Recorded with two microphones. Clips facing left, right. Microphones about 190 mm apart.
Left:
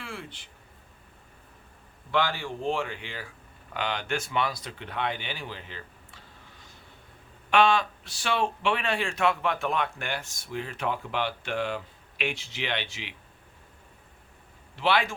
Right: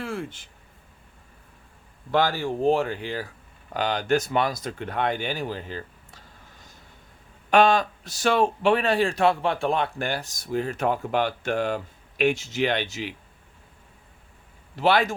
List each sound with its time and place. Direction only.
0.0 s a sound: 45° right (ahead or behind)
2.1 s a man's voice: 40° right (ahead or behind)
7.5 s a man's voice: 40° right (ahead or behind)
14.8 s speech: 40° right (ahead or behind)